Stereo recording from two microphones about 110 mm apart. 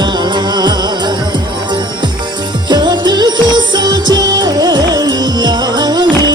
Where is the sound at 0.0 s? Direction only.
40° right (ahead or behind).